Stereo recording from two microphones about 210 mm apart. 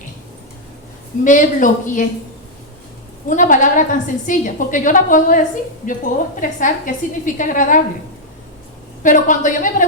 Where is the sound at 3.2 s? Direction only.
40° left (ahead or behind).